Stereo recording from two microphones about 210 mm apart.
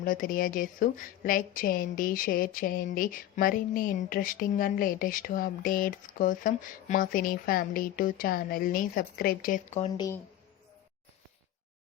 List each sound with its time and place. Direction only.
0.0 s a woman's voice: 40° left (ahead or behind)